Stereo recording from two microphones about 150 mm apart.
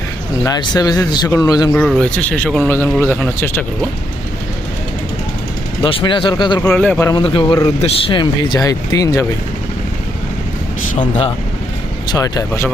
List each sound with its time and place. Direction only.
0.4 s speech: 25° left (ahead or behind)
1.9 s speech: 5° left (ahead or behind)
6.1 s speech: 30° left (ahead or behind)
6.7 s speech: 10° left (ahead or behind)
7.1 s speech: 35° left (ahead or behind)
12.0 s speech: 25° left (ahead or behind)